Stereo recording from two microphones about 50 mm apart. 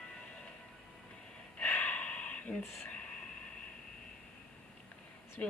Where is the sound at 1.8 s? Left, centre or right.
Left.